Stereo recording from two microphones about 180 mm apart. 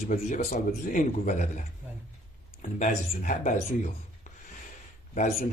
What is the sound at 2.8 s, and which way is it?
Speech, 45° left (ahead or behind).